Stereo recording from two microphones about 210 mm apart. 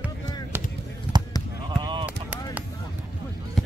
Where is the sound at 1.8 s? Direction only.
20° right (ahead or behind).